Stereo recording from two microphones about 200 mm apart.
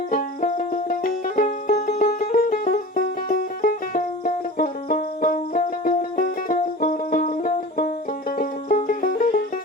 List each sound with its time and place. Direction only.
0.1 s music: 40° left (ahead or behind)